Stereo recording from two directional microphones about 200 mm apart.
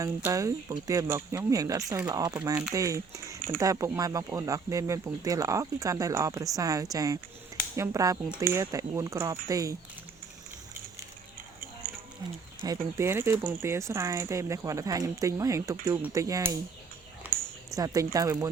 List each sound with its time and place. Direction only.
0.0 s speech: 15° right (ahead or behind)
12.6 s speech: 15° right (ahead or behind)
17.7 s speech: 20° right (ahead or behind)